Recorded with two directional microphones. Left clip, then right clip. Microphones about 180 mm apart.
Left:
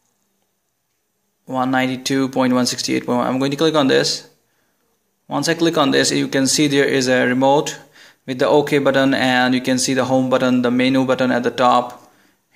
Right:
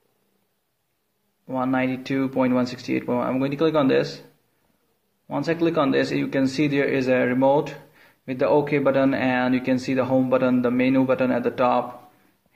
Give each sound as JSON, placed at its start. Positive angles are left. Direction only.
{"t": 1.4, "sound": "speech", "side_deg": 40}
{"t": 5.3, "sound": "speech", "side_deg": 40}